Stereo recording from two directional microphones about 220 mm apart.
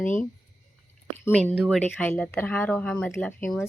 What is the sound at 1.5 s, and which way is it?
Speech, 5° right (ahead or behind).